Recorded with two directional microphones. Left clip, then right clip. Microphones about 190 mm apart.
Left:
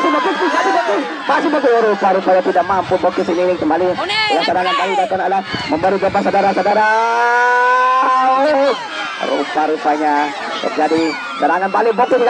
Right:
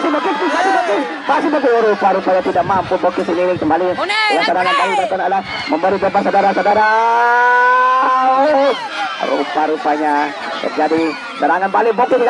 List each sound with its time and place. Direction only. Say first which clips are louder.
0.0 s a sound: left 1 dB; 20° right (ahead or behind)
0.8 s speech: even; 20° right (ahead or behind); by 3.8 s centre (ahead or behind)
4.1 s speech: right 2 dB; 25° right (ahead or behind)
5.2 s a man's voice: even; 5° left (ahead or behind)